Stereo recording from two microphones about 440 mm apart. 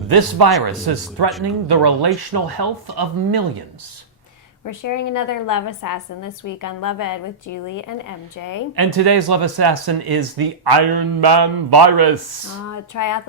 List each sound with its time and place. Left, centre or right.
0.1 s a man's voice: right
4.6 s a woman's voice: left
8.7 s speech: right
12.6 s speech: left